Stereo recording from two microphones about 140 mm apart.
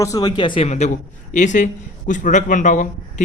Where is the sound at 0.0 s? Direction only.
25° left (ahead or behind).